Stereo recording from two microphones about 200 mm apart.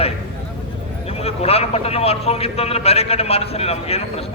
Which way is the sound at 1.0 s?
30° left (ahead or behind).